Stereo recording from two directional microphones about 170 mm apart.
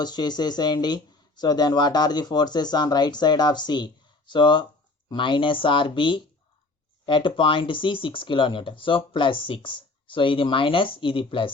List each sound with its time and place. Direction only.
0.0 s speech: 25° left (ahead or behind)